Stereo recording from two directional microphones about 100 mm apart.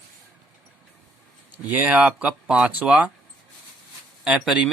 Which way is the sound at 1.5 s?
15° right (ahead or behind).